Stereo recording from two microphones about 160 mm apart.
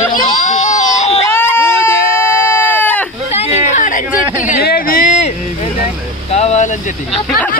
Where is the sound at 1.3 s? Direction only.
15° left (ahead or behind).